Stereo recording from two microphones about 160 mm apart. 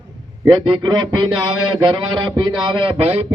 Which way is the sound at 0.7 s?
30° right (ahead or behind).